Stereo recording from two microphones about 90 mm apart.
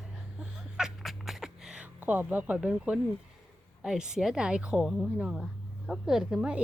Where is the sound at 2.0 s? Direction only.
20° right (ahead or behind); by 5.5 s centre (ahead or behind).